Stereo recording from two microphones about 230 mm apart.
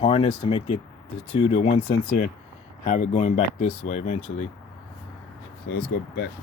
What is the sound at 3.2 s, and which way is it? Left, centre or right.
Speech, left.